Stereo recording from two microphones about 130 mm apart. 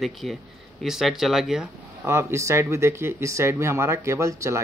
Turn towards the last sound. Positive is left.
turn(degrees=-25)  # may be behind; listen again after turning